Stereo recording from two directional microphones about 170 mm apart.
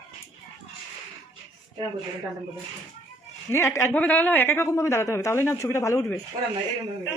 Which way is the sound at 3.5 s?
15° left (ahead or behind).